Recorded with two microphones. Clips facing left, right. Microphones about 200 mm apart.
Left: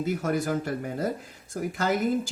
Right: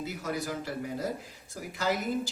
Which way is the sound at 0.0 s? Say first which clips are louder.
Left 7 dB; 50° left (ahead or behind).